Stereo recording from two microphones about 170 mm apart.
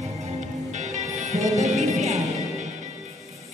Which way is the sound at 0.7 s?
45° right (ahead or behind).